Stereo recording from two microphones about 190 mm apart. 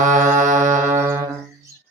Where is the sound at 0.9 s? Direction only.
15° right (ahead or behind).